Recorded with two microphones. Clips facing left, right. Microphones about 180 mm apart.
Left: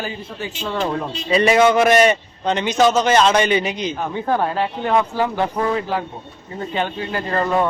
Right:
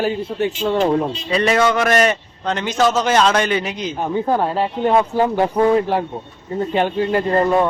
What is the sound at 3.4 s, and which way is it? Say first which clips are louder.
A man's voice: left 1 dB; centre (ahead or behind).